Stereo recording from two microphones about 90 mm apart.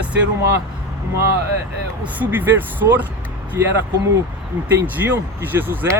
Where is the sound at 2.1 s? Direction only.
20° right (ahead or behind).